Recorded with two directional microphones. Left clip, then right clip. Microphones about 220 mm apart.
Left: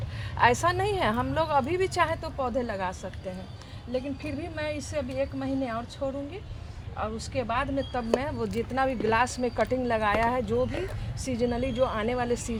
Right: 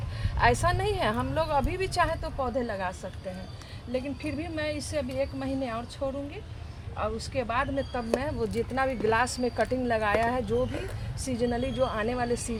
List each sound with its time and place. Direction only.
0.3 s speech: 25° left (ahead or behind)